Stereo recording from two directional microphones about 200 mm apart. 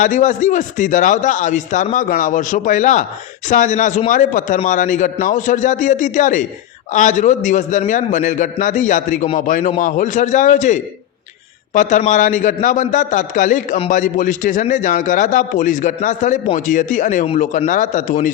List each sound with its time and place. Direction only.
0.0 s a man's voice: 40° left (ahead or behind)